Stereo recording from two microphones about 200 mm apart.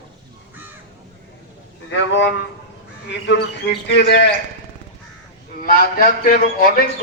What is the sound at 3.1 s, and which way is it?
A man's voice, 60° left (ahead or behind).